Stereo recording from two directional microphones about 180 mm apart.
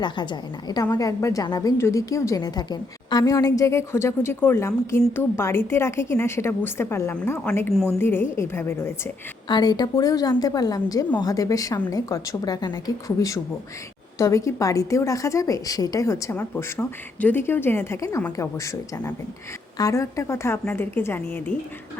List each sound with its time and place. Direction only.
0.0 s a woman's voice: 25° left (ahead or behind)
9.5 s a woman's voice: 25° left (ahead or behind)